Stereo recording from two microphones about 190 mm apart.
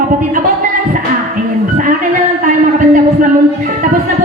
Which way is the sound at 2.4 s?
45° right (ahead or behind).